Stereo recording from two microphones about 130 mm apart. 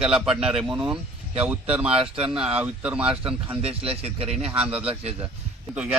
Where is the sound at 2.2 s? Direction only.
5° right (ahead or behind).